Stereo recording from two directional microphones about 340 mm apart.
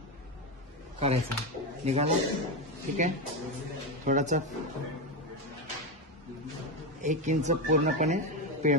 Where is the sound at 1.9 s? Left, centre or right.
Centre.